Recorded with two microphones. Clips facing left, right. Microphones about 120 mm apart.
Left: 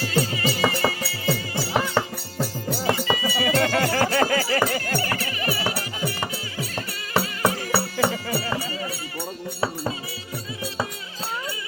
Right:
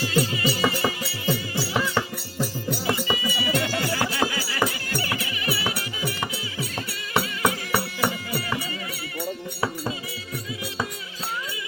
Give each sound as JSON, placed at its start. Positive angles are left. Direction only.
{"t": 0.1, "sound": "music", "side_deg": 35}
{"t": 3.6, "sound": "music", "side_deg": 55}
{"t": 4.3, "sound": "a sound", "side_deg": 55}
{"t": 4.6, "sound": "music", "side_deg": 45}